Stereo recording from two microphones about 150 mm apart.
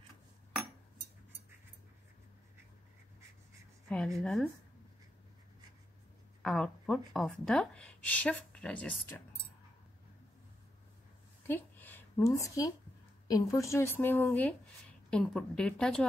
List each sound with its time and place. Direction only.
4.2 s a woman's voice: centre (ahead or behind)
6.4 s speech: 5° left (ahead or behind)
11.4 s a woman's voice: 15° left (ahead or behind)